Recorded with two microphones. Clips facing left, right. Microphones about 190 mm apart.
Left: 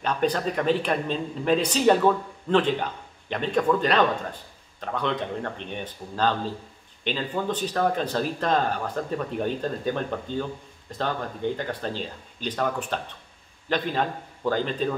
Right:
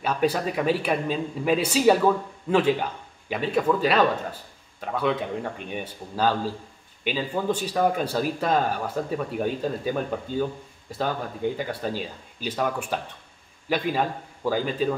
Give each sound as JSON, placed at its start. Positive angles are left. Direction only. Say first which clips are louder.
{"t": 0.0, "sound": "a man's voice", "louder": "right 1 dB", "side_deg": -5}